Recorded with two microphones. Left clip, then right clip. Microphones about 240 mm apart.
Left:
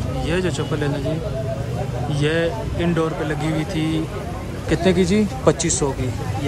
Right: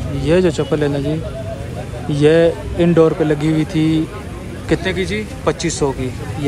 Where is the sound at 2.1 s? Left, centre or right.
Centre.